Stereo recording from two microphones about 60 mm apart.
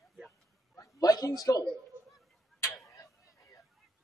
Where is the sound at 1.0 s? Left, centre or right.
Left.